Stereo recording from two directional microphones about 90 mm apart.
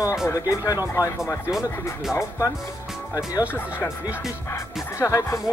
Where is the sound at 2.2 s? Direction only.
35° left (ahead or behind).